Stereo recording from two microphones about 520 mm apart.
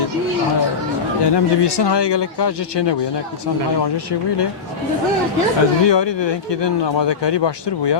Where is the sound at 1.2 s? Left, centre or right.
Left.